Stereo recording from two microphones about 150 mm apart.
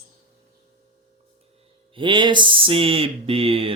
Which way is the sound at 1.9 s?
35° right (ahead or behind).